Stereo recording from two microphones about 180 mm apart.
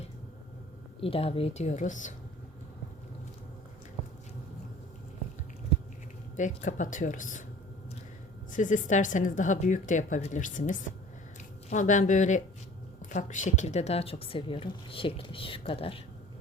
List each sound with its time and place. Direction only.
1.0 s speech: 30° left (ahead or behind)
6.3 s speech: 45° left (ahead or behind)
8.5 s speech: 45° left (ahead or behind)